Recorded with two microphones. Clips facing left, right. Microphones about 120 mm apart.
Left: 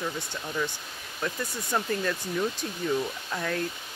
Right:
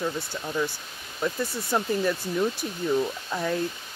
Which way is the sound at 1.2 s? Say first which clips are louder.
Right 4 dB; 15° right (ahead or behind).